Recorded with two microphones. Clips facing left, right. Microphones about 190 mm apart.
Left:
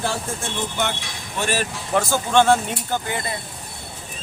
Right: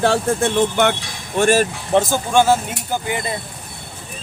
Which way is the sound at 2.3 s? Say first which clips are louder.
Even; 10° right (ahead or behind).